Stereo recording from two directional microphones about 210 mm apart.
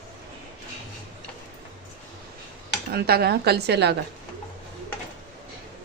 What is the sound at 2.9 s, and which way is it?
A woman's voice, 50° right (ahead or behind).